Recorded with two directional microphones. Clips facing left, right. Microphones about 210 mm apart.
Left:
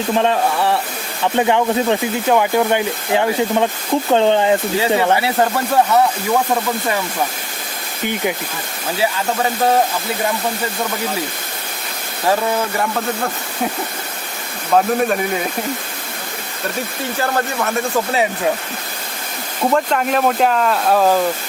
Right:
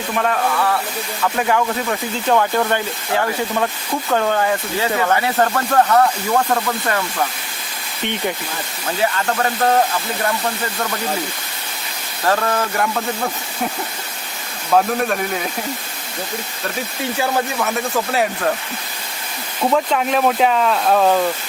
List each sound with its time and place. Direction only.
0.1 s speech: 25° left (ahead or behind)
2.2 s speech: 10° left (ahead or behind)
9.1 s speech: 10° left (ahead or behind)
12.2 s speech: 10° left (ahead or behind)
14.8 s speech: 5° left (ahead or behind)
17.2 s speech: 5° right (ahead or behind)
19.7 s speech: centre (ahead or behind)